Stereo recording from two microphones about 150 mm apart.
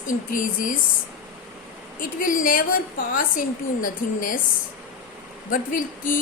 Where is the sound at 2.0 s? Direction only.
65° left (ahead or behind).